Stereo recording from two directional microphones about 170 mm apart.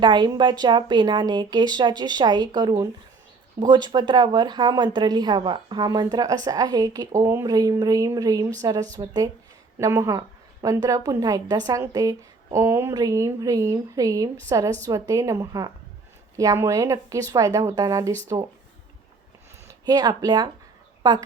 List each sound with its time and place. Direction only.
0.0 s speech: 25° right (ahead or behind)
19.6 s a woman's voice: 25° right (ahead or behind)